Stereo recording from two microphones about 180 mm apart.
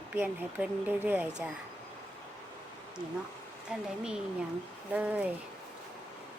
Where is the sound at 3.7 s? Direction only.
5° right (ahead or behind).